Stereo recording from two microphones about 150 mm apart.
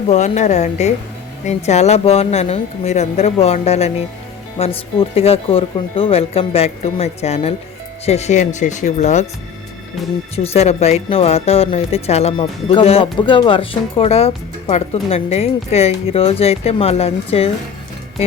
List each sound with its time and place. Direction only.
0.1 s speech: 50° left (ahead or behind)
10.3 s speech: 45° left (ahead or behind)